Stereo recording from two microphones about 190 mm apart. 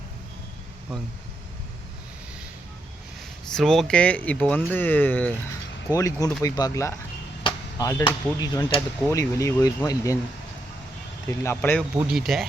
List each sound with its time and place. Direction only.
3.5 s speech: centre (ahead or behind); by 10.2 s 20° left (ahead or behind)
11.3 s speech: 10° left (ahead or behind)
11.8 s speech: 5° right (ahead or behind)